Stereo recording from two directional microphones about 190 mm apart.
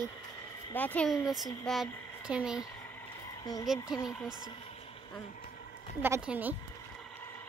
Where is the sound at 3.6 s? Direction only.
Centre (ahead or behind).